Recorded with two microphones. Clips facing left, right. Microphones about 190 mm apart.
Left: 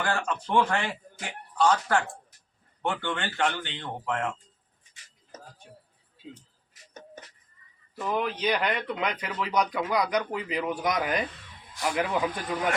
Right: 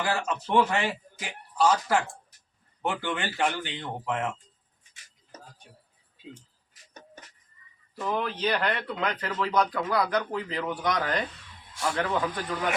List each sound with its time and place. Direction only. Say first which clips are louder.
0.0 s speech: even; 5° right (ahead or behind)
7.9 s speech: left 1 dB; 10° left (ahead or behind)